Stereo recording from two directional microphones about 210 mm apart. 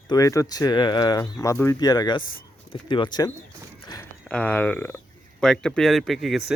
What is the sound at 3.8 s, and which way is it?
Walk, 20° left (ahead or behind).